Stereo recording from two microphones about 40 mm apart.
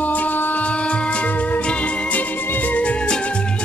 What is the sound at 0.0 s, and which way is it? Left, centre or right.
Music, left.